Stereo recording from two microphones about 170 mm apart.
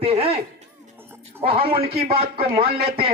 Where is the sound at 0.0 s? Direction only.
35° right (ahead or behind).